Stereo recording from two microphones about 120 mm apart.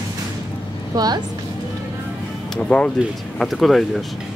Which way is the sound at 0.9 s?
35° right (ahead or behind).